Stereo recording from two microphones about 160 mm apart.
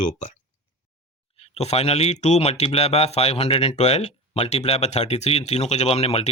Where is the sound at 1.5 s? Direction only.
40° left (ahead or behind).